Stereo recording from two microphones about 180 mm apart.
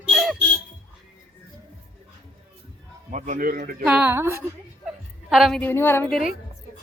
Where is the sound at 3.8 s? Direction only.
5° right (ahead or behind).